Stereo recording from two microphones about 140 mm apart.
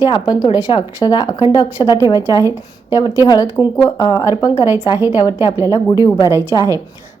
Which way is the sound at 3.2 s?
30° left (ahead or behind).